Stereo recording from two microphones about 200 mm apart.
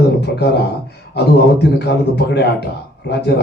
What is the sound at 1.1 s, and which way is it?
Speech, 55° left (ahead or behind).